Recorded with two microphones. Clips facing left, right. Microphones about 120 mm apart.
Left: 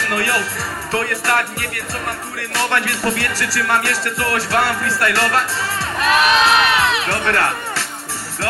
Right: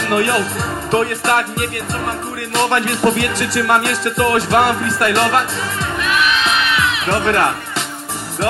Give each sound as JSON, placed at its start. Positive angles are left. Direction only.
{"t": 0.0, "sound": "speech", "side_deg": -20}
{"t": 0.9, "sound": "music", "side_deg": -20}
{"t": 5.9, "sound": "crowd", "side_deg": 40}
{"t": 7.1, "sound": "speech", "side_deg": -20}